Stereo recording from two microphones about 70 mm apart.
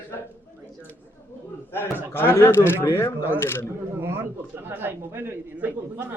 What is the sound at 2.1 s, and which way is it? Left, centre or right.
Speech, left.